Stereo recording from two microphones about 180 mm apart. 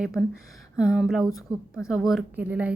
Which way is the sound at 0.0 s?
5° right (ahead or behind).